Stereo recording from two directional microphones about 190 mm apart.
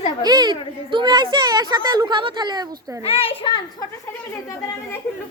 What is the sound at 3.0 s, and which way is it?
Speech, 30° left (ahead or behind).